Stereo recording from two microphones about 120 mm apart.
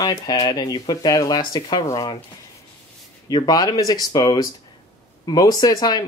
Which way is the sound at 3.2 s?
35° left (ahead or behind).